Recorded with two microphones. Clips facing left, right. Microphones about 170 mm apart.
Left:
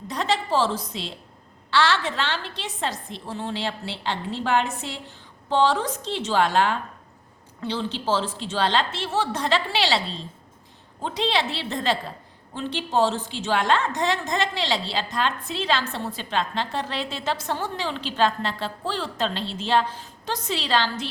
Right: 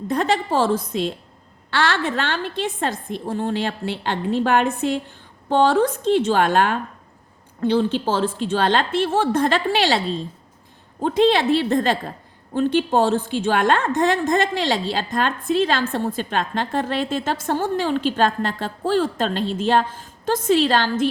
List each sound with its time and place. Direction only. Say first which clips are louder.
0.1 s a woman's voice: right 4 dB; 50° right (ahead or behind)